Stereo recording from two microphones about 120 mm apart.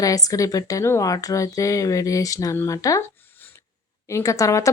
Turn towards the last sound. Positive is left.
turn(degrees=25)  # may be behind; listen again after turning